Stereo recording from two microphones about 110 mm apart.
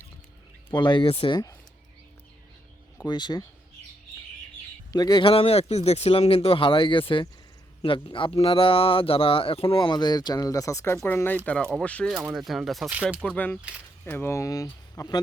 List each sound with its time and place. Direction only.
0.7 s speech: 45° left (ahead or behind)
1.0 s speech: 55° left (ahead or behind)
3.0 s speech: 40° left (ahead or behind)
4.9 s speech: 35° left (ahead or behind)
5.2 s speech: 60° left (ahead or behind); by 11.3 s 20° left (ahead or behind)
11.4 s speech: 10° left (ahead or behind)
12.2 s speech: 5° right (ahead or behind)
12.9 s speech: 10° right (ahead or behind)
13.2 s speech: 15° left (ahead or behind); by 15.2 s 35° left (ahead or behind)